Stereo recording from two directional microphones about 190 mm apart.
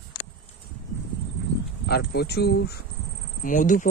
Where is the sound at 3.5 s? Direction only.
45° left (ahead or behind).